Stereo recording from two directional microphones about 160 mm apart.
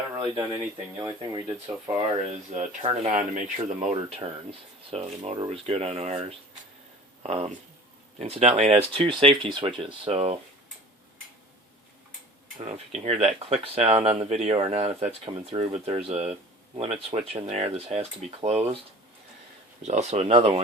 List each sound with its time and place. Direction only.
0.1 s a sound: 25° right (ahead or behind)
0.9 s speech: 25° right (ahead or behind)
2.6 s speech: 40° right (ahead or behind)
3.1 s speech: 50° right (ahead or behind)
12.5 s speech: 45° right (ahead or behind)
19.8 s speech: 45° right (ahead or behind)